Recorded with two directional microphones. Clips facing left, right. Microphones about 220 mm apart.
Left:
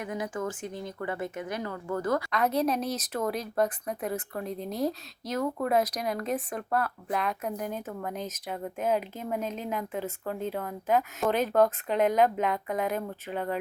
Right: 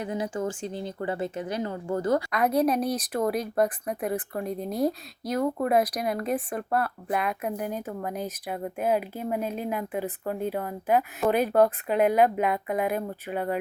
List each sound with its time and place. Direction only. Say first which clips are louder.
0.0 s speech: right 3 dB; 30° right (ahead or behind)
2.3 s speech: right 3 dB; 10° right (ahead or behind)
5.6 s speech: right 1 dB; 10° right (ahead or behind)